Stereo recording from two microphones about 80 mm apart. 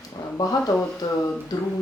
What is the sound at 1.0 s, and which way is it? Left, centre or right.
Speech, left.